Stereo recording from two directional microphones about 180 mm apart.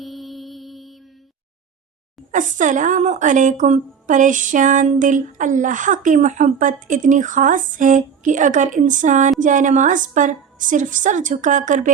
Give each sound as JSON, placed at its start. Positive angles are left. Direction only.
{"t": 0.0, "sound": "mantra", "side_deg": 0}
{"t": 2.3, "sound": "a woman's voice", "side_deg": -45}